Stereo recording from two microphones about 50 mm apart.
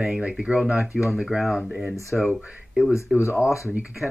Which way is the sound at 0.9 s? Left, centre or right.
Centre.